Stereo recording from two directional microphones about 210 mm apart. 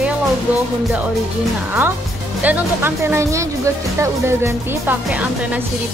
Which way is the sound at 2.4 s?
10° right (ahead or behind).